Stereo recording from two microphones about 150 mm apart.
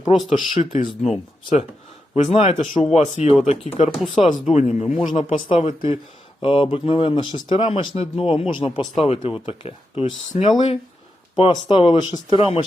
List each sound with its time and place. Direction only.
0.1 s speech: 50° left (ahead or behind)
2.1 s speech: 50° left (ahead or behind)
2.7 s speech: 40° left (ahead or behind)
3.0 s speech: 50° left (ahead or behind)
3.9 s speech: centre (ahead or behind)
4.4 s speech: 45° left (ahead or behind)
5.0 s speech: 55° left (ahead or behind)
5.5 s speech: 35° left (ahead or behind)